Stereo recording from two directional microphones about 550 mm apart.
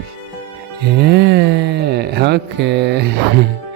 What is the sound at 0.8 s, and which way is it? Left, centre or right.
Speech, centre.